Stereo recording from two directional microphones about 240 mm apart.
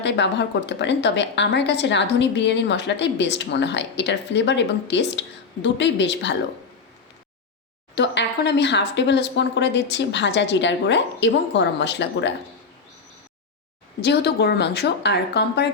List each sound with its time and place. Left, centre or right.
0.0 s a woman's voice: left
7.9 s a woman's voice: left
14.0 s a woman's voice: left